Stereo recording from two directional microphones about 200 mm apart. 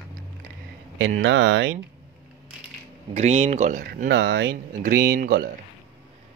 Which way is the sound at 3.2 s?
35° right (ahead or behind).